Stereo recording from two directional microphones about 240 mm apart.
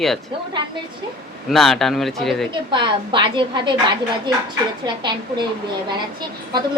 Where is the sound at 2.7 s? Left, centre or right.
Centre.